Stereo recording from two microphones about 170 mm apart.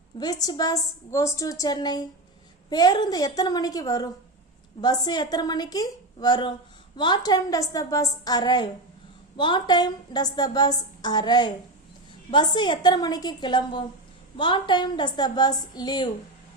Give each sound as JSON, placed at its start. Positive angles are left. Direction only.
{"t": 0.2, "sound": "a woman's voice", "side_deg": 20}